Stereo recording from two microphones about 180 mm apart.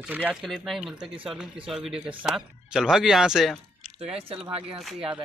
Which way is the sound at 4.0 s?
35° right (ahead or behind).